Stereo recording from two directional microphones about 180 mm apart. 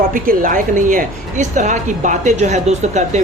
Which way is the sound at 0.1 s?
50° right (ahead or behind).